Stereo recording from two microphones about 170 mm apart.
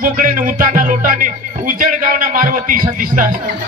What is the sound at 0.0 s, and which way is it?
Music, 50° right (ahead or behind).